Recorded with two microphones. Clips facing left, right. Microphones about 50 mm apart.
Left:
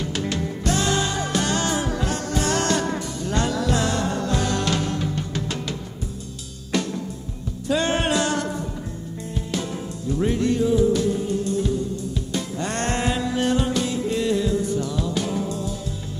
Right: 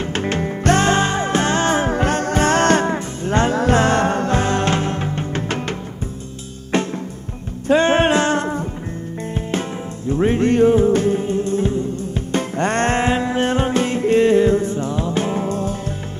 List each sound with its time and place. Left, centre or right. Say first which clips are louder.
0.0 s music: right 5 dB; right